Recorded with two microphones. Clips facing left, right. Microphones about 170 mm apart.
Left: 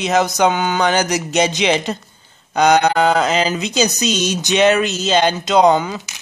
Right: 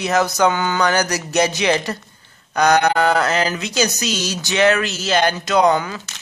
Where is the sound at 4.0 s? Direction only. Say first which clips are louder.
Left 5 dB; 20° left (ahead or behind).